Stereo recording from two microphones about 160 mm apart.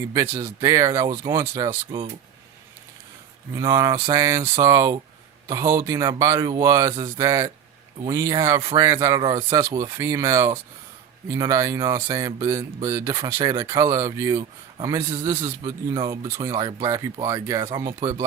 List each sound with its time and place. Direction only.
0.1 s speech: 20° right (ahead or behind)
3.7 s speech: 20° right (ahead or behind)